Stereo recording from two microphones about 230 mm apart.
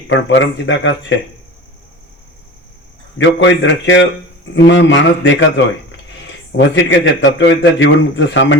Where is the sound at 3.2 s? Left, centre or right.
Left.